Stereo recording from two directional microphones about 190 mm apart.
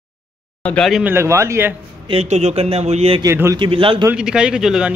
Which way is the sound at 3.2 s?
15° right (ahead or behind).